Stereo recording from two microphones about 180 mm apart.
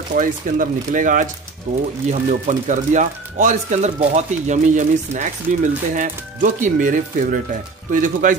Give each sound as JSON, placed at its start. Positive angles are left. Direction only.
{"t": 0.1, "sound": "speech", "side_deg": -50}